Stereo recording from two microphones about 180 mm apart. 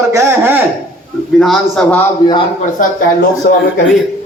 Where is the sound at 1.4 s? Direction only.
Centre (ahead or behind).